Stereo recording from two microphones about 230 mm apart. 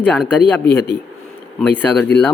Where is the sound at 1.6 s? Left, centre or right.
Centre.